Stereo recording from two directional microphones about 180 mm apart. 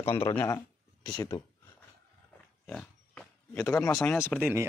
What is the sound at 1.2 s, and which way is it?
Speech, 20° left (ahead or behind).